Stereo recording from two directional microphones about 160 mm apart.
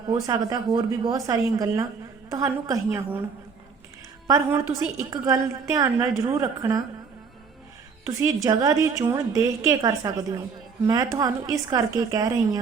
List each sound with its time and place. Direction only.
0.1 s a woman's voice: 25° right (ahead or behind)
4.3 s a woman's voice: 20° right (ahead or behind)
8.0 s a woman's voice: 20° right (ahead or behind)